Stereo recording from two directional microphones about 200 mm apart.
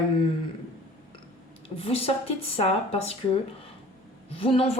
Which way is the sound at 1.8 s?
30° left (ahead or behind).